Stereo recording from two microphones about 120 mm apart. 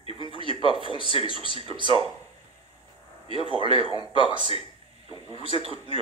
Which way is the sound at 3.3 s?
50° right (ahead or behind).